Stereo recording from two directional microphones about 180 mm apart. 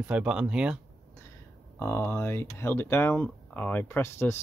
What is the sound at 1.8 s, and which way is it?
Speech, 15° left (ahead or behind).